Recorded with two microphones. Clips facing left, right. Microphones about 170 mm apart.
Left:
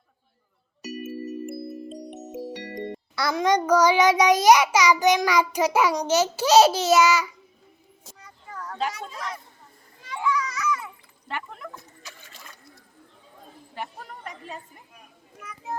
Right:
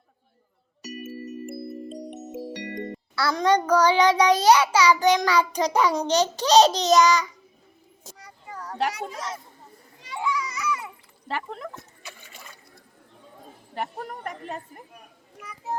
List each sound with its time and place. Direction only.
3.2 s a child's voice: 15° left (ahead or behind)
10.2 s children playing: 15° right (ahead or behind)
11.3 s speech: 35° right (ahead or behind)
13.7 s a woman's voice: 50° right (ahead or behind)